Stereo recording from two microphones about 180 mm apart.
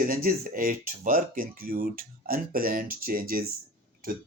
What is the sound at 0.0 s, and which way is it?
Speech, 55° right (ahead or behind).